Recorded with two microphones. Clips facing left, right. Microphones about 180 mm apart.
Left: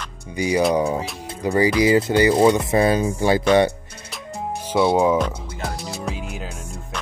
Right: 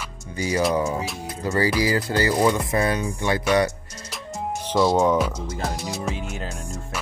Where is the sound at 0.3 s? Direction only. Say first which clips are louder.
Left 3 dB; 15° left (ahead or behind).